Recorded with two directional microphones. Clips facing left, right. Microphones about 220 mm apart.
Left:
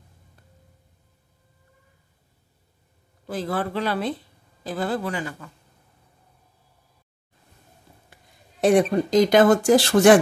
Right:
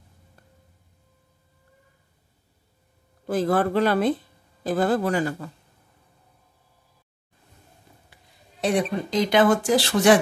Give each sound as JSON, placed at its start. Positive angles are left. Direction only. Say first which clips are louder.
{"t": 3.3, "sound": "speech", "louder": "right 5 dB", "side_deg": -50}
{"t": 8.1, "sound": "speech", "louder": "left 1 dB", "side_deg": 50}